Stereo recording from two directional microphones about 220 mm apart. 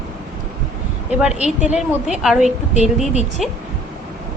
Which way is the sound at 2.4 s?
30° right (ahead or behind).